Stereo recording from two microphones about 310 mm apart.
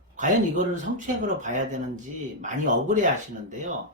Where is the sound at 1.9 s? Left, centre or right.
Right.